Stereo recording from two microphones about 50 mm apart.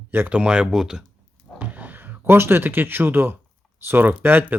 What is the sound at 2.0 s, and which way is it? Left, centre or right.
Speech, right.